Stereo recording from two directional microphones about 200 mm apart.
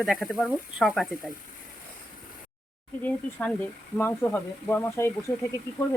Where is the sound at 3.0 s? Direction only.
5° left (ahead or behind).